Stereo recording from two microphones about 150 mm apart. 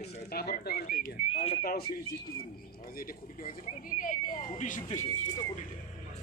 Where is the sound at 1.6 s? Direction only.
80° left.